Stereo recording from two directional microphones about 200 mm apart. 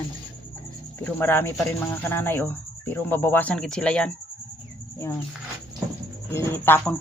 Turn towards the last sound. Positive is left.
turn(degrees=10)  # may be behind; listen again after turning